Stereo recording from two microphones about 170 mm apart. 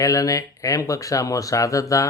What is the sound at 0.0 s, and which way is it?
Speech, 20° left (ahead or behind).